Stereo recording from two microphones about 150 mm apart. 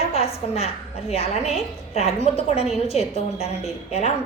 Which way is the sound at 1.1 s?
45° left (ahead or behind).